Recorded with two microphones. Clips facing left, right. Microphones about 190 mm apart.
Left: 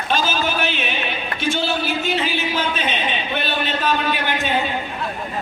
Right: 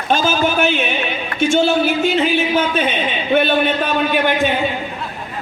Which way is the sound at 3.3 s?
50° right (ahead or behind).